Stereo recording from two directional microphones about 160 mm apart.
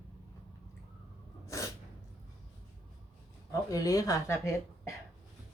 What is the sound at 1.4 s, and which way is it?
Sneeze, 20° left (ahead or behind).